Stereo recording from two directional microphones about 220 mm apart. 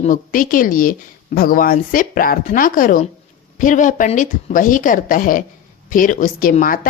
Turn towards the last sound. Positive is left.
turn(degrees=40)  # may be behind; listen again after turning